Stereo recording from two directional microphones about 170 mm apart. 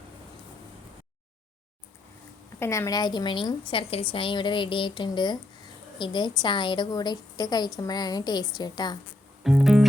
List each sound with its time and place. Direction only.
2.6 s a woman's voice: 15° left (ahead or behind)
9.4 s music: 5° right (ahead or behind)